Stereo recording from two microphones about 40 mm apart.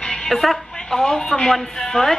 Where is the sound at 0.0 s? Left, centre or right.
Centre.